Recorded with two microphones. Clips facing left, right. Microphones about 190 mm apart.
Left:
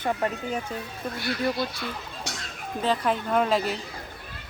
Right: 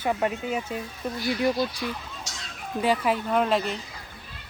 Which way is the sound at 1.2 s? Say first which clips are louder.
Right 3 dB; 60° left (ahead or behind).